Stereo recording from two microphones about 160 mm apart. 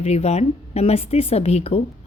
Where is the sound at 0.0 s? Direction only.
40° left (ahead or behind).